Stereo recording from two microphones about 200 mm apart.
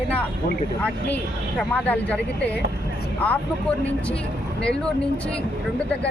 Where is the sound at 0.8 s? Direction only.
5° left (ahead or behind).